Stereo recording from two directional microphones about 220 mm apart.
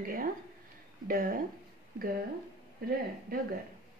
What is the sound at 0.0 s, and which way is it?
A woman's voice, 40° right (ahead or behind).